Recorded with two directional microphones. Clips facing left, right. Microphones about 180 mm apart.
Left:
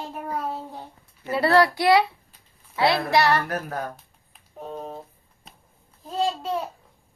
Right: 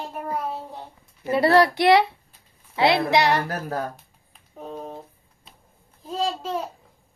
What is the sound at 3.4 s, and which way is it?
Speech, 30° right (ahead or behind).